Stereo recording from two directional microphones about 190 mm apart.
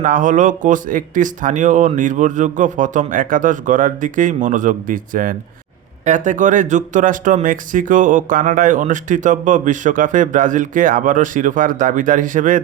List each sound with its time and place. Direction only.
0.0 s speech: 40° right (ahead or behind)